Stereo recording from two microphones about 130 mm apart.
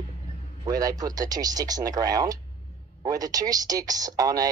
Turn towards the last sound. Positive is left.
turn(degrees=-30)  # may be behind; listen again after turning